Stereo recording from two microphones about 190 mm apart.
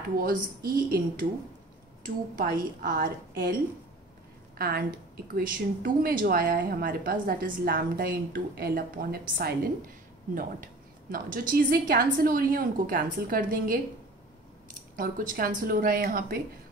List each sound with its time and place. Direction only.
0.2 s a woman's voice: 50° right (ahead or behind)
2.0 s a woman's voice: 45° right (ahead or behind)
15.0 s a woman's voice: 45° right (ahead or behind)